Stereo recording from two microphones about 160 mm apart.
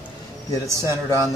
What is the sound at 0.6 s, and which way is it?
Speech, 20° right (ahead or behind).